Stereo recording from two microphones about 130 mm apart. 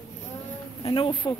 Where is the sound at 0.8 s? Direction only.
40° left (ahead or behind).